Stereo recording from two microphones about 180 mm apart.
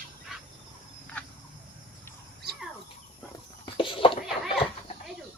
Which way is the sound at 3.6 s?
25° left (ahead or behind).